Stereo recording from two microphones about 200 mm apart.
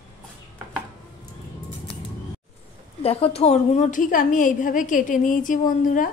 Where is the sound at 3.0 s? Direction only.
30° left (ahead or behind).